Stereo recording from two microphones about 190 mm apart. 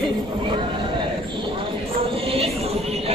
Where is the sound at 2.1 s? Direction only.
30° right (ahead or behind).